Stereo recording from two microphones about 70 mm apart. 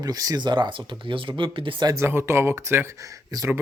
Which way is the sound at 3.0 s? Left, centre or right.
Right.